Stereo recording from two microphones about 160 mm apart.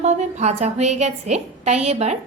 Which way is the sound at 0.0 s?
45° right (ahead or behind).